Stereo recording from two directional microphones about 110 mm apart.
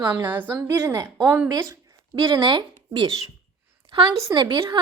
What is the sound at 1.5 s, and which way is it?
Speech, 35° right (ahead or behind).